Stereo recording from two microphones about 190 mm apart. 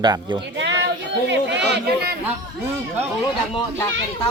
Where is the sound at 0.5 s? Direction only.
65° right (ahead or behind).